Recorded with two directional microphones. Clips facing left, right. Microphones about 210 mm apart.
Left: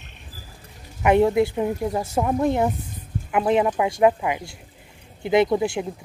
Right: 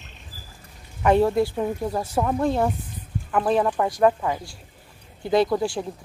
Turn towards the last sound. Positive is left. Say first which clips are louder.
# left 2 dB
turn(degrees=20)  # may be behind; listen again after turning